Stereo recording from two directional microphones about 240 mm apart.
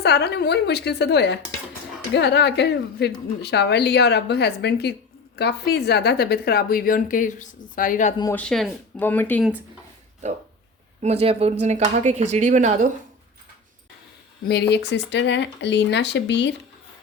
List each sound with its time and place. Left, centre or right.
0.0 s a woman's voice: left
8.2 s speech: centre
11.0 s speech: right
14.4 s speech: left